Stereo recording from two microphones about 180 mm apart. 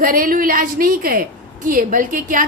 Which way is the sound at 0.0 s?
50° right (ahead or behind).